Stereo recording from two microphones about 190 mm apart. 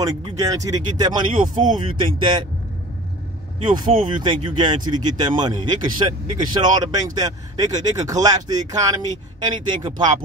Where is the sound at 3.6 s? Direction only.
25° right (ahead or behind).